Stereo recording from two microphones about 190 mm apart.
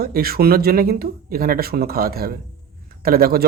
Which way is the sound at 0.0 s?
50° right (ahead or behind).